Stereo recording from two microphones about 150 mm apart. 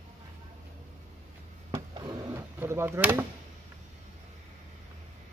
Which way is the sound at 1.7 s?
25° right (ahead or behind).